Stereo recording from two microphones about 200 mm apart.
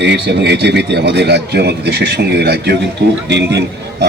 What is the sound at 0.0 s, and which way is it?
A man's voice, 60° right (ahead or behind).